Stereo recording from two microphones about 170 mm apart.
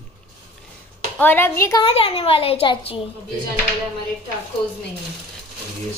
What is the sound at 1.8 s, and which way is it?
A child's voice, 35° left (ahead or behind).